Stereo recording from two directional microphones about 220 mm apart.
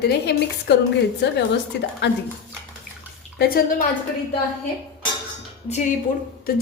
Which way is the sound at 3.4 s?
40° left (ahead or behind).